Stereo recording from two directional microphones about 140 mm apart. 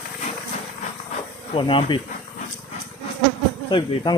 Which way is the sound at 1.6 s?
35° left (ahead or behind).